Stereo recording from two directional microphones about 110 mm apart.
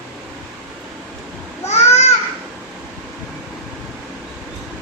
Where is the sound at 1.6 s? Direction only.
85° left.